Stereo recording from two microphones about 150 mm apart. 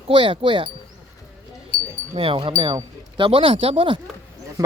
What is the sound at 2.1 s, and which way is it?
Speech, 40° right (ahead or behind).